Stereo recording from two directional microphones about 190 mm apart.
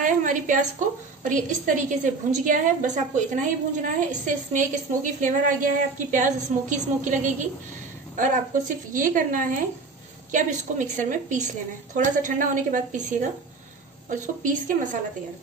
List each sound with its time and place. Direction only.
0.0 s a woman's voice: 45° right (ahead or behind)